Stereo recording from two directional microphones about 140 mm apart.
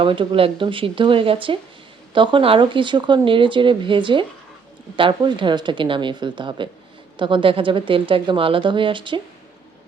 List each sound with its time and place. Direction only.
0.0 s speech: 35° right (ahead or behind)